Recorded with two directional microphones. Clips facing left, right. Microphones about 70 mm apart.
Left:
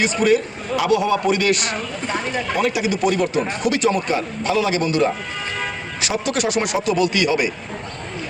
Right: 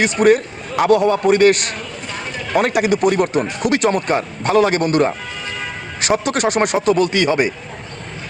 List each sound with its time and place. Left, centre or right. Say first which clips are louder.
0.0 s speech: right 4 dB; right
2.6 s speech: right 6 dB; right